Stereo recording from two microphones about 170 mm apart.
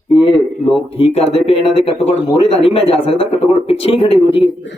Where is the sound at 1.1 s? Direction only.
35° left (ahead or behind).